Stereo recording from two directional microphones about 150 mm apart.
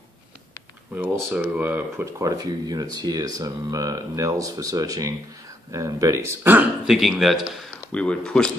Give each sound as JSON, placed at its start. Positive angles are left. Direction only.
{"t": 0.9, "sound": "speech", "side_deg": -10}
{"t": 6.9, "sound": "speech", "side_deg": 0}